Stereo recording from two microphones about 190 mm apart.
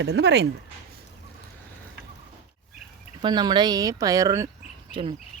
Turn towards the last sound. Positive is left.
turn(degrees=-30)  # may be behind; listen again after turning